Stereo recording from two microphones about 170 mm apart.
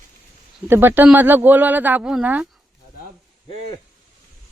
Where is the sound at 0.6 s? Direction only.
15° right (ahead or behind).